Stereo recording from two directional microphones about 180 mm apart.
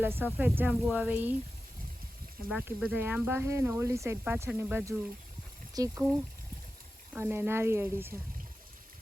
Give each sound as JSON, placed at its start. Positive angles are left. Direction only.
{"t": 0.0, "sound": "speech", "side_deg": -10}
{"t": 2.5, "sound": "speech", "side_deg": -10}
{"t": 7.1, "sound": "speech", "side_deg": -10}